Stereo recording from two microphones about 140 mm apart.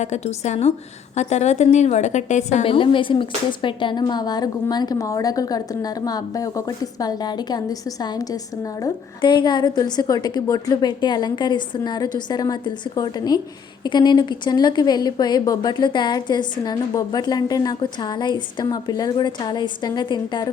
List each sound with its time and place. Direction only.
0.0 s a woman's voice: 55° left (ahead or behind)
2.6 s speech: 35° left (ahead or behind)